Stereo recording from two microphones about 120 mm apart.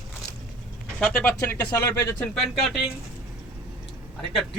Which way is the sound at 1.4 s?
20° left (ahead or behind).